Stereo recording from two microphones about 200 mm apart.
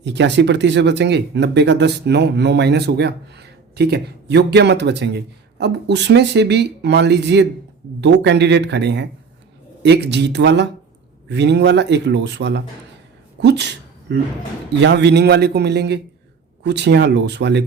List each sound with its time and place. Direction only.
0.0 s speech: 60° right (ahead or behind)
13.4 s a sound: 60° right (ahead or behind)
14.8 s speech: 60° right (ahead or behind)